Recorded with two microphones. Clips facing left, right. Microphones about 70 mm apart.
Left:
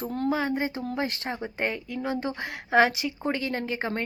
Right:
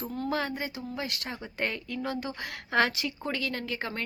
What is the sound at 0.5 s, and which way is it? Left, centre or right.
A woman's voice, left.